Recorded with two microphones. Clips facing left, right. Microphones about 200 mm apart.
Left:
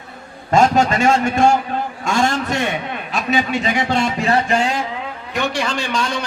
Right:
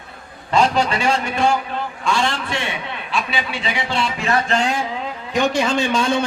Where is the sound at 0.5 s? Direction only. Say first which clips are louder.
Left 3 dB; 45° left (ahead or behind).